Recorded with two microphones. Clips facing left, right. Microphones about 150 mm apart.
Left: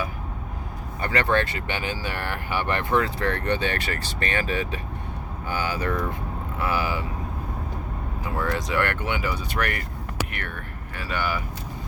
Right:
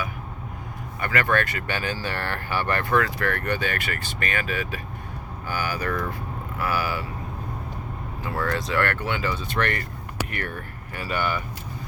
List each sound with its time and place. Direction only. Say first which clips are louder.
1.0 s speech: left 1 dB; 30° left (ahead or behind)
8.2 s speech: even; 15° left (ahead or behind)
11.2 s speech: right 1 dB; 5° left (ahead or behind)